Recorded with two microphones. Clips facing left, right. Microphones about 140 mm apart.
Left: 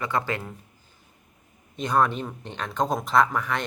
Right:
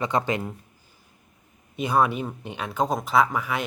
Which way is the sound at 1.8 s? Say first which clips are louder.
Right 1 dB; 10° right (ahead or behind).